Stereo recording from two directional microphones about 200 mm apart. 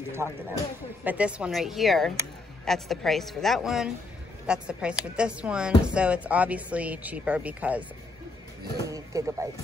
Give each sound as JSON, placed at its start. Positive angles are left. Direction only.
{"t": 0.1, "sound": "a woman's voice", "side_deg": -15}
{"t": 8.8, "sound": "a woman's voice", "side_deg": -15}